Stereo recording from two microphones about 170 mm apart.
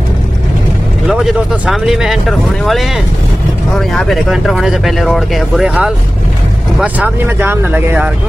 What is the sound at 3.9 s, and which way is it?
Speech, centre (ahead or behind).